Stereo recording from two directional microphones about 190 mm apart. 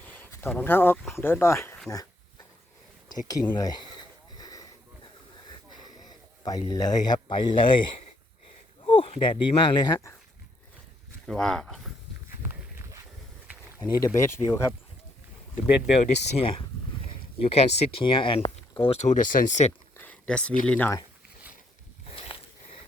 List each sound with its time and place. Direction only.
0.0 s speech: 10° left (ahead or behind)
3.2 s a sound: 20° left (ahead or behind)
6.1 s speech: 20° left (ahead or behind)
8.8 s speech: 25° left (ahead or behind)
11.3 s speech: 5° left (ahead or behind)
13.7 s speech: 15° left (ahead or behind)
16.1 s speech: 35° left (ahead or behind)
20.0 s a sound: 5° left (ahead or behind)
20.7 s speech: 10° left (ahead or behind)
22.1 s a sound: 25° left (ahead or behind)